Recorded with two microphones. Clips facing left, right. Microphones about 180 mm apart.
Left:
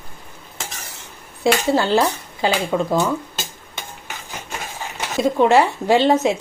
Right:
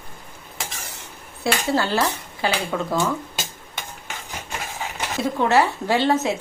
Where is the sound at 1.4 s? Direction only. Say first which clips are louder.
Left 5 dB; 20° left (ahead or behind).